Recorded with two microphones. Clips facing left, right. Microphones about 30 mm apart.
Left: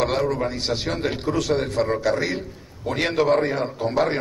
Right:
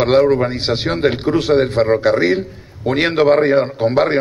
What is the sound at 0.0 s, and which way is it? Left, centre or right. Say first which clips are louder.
A man's voice: right 9 dB; right.